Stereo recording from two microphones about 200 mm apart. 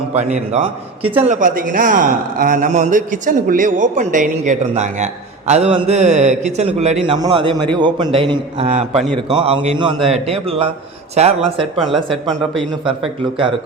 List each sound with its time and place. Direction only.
0.1 s a man's voice: 35° right (ahead or behind)
1.3 s a man's voice: 40° right (ahead or behind)
7.2 s a man's voice: 20° right (ahead or behind)